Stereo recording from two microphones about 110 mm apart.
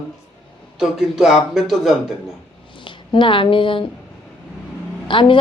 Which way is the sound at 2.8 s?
50° left (ahead or behind).